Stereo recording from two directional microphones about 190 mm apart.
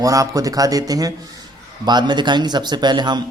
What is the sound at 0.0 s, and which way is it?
A man's voice, 20° right (ahead or behind).